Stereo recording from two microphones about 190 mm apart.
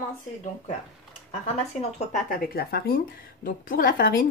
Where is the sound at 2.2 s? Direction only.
50° left (ahead or behind).